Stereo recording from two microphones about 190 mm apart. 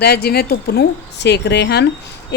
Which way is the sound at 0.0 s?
55° left (ahead or behind).